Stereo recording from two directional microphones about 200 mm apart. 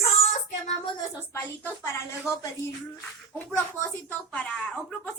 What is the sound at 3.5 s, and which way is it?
Speech, 5° left (ahead or behind).